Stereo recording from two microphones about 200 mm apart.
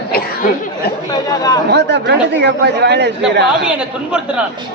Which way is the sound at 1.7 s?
55° right (ahead or behind).